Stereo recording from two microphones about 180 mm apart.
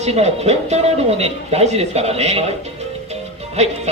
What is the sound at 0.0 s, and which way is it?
Speech, 35° right (ahead or behind).